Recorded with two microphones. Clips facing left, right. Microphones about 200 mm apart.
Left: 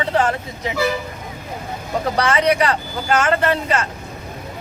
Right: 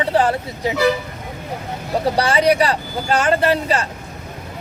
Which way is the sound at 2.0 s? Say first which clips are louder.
Right 2 dB; 35° right (ahead or behind).